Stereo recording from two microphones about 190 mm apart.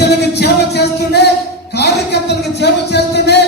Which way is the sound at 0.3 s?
60° left (ahead or behind).